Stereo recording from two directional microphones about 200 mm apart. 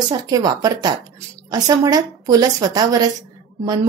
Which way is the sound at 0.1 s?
20° right (ahead or behind).